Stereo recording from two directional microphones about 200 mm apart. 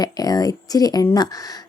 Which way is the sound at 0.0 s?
20° left (ahead or behind).